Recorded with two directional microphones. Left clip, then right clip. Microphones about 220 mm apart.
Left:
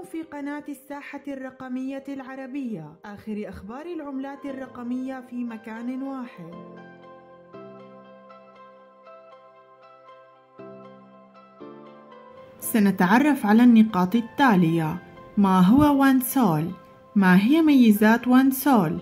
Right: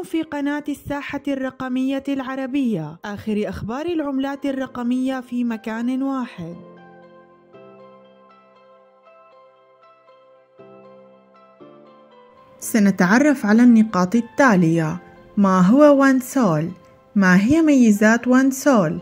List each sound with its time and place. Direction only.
0.1 s speech: 35° right (ahead or behind)
12.5 s a woman's voice: 20° right (ahead or behind)